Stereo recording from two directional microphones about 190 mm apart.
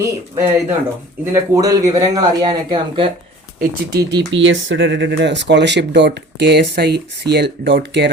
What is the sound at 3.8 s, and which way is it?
Speech, 55° right (ahead or behind).